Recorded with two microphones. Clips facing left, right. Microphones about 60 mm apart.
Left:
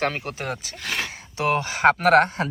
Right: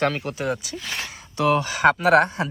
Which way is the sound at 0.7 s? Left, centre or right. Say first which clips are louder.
Left 2 dB; left.